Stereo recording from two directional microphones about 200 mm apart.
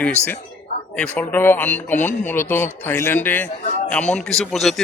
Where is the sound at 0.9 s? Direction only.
5° left (ahead or behind).